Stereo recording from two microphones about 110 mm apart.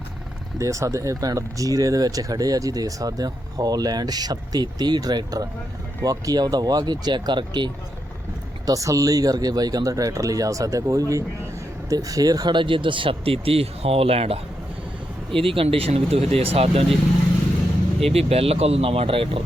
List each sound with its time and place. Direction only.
0.6 s speech: 30° right (ahead or behind)
8.6 s speech: 30° right (ahead or behind); by 16.8 s 60° right (ahead or behind)
18.1 s speech: 65° right (ahead or behind)